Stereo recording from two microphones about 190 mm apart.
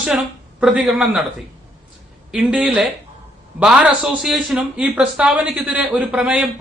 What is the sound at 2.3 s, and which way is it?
Speech, 5° right (ahead or behind).